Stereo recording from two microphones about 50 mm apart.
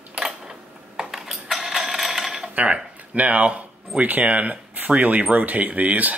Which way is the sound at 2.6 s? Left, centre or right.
Right.